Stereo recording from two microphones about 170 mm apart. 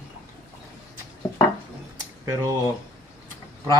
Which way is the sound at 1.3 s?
20° left (ahead or behind).